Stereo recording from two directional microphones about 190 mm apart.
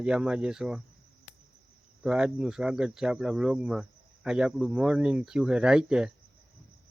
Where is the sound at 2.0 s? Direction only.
5° right (ahead or behind).